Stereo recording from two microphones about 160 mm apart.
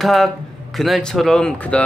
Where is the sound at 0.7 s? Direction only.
Centre (ahead or behind).